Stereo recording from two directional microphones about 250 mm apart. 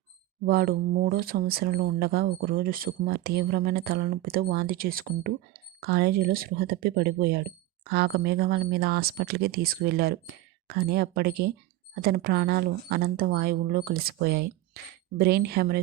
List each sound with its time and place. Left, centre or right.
0.4 s speech: right